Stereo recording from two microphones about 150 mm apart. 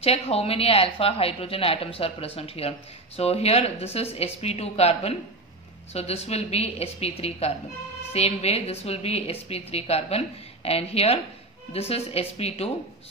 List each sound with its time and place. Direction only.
0.0 s a woman's voice: 40° left (ahead or behind)